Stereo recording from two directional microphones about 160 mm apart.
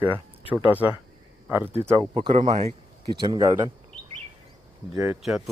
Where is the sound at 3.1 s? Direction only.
25° right (ahead or behind).